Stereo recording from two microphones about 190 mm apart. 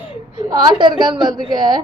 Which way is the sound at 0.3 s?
25° right (ahead or behind).